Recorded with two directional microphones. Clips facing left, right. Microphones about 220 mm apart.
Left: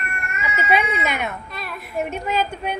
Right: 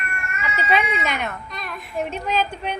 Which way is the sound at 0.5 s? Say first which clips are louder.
Left 1 dB; 5° left (ahead or behind).